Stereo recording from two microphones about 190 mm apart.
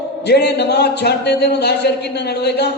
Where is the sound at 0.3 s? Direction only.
60° left (ahead or behind).